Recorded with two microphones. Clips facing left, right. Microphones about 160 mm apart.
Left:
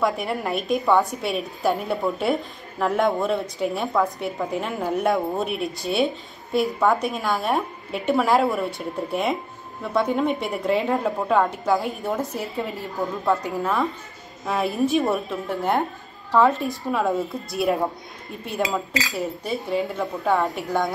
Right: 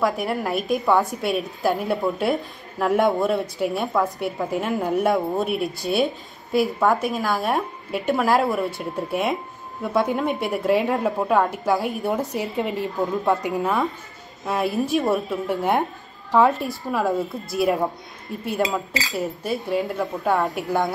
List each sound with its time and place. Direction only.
0.0 s a woman's voice: centre (ahead or behind)
12.4 s a woman's voice: 20° right (ahead or behind)
14.4 s a woman's voice: centre (ahead or behind)
16.4 s a woman's voice: centre (ahead or behind)
19.1 s a woman's voice: centre (ahead or behind)